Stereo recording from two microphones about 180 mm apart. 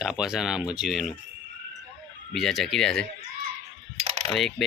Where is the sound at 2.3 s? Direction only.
Centre (ahead or behind).